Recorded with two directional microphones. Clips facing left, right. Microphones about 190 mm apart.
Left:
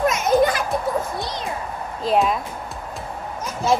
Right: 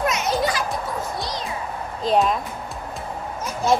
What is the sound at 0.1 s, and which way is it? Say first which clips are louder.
Children playing: left 5 dB; 50° left (ahead or behind).